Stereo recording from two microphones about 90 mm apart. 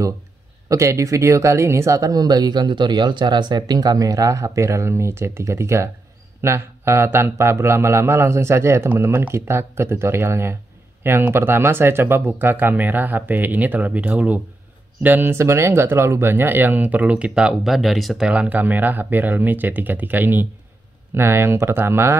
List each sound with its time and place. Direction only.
0.7 s speech: 35° right (ahead or behind)